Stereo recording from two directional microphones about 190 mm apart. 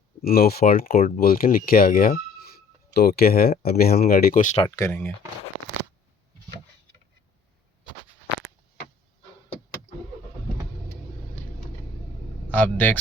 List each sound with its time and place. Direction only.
0.2 s speech: 50° left (ahead or behind)
4.8 s speech: 10° left (ahead or behind)
12.5 s speech: 10° left (ahead or behind)